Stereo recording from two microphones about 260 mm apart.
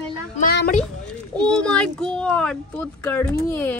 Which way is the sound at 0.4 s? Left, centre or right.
Left.